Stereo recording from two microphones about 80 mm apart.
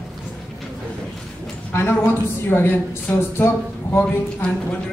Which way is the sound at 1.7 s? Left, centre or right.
Left.